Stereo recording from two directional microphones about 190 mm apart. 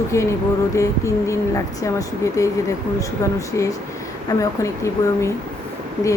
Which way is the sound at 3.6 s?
15° left (ahead or behind).